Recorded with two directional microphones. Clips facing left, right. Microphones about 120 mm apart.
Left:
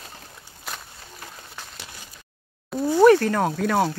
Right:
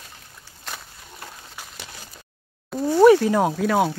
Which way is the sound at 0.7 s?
5° left (ahead or behind).